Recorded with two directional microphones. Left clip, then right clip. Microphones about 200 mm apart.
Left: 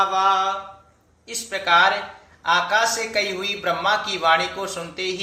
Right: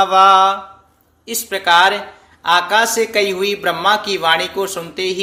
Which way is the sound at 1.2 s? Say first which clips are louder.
Right 6 dB; 55° right (ahead or behind).